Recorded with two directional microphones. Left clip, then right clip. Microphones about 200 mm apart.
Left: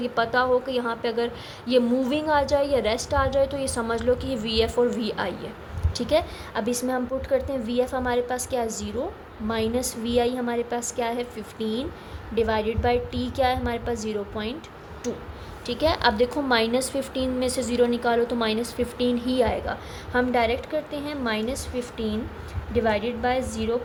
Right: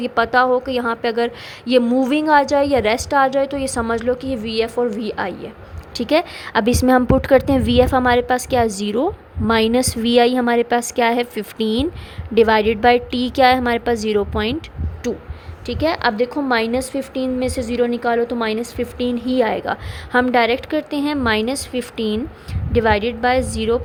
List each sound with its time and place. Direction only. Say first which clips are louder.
0.0 s a woman's voice: right 7 dB; 40° right (ahead or behind)
5.9 s a woman's voice: right 6 dB; 40° right (ahead or behind)